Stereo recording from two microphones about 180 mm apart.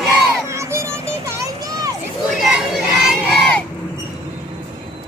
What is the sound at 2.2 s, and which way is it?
Crowd, centre (ahead or behind).